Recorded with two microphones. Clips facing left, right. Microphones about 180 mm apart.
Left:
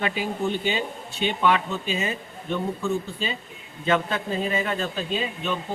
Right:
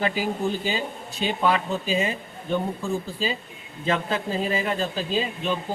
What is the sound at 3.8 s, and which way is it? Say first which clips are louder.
Speech: left 1 dB; 30° right (ahead or behind).